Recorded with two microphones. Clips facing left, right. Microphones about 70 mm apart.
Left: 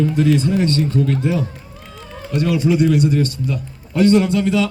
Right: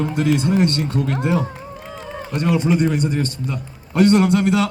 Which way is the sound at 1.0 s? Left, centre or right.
Right.